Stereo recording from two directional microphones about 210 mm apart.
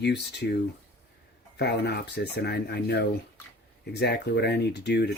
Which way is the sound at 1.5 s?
50° left (ahead or behind).